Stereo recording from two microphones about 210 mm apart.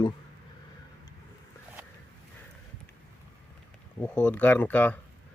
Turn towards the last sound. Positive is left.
turn(degrees=5)  # may be behind; listen again after turning